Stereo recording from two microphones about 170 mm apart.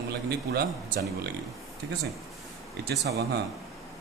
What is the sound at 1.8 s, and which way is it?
Speech, 90° right.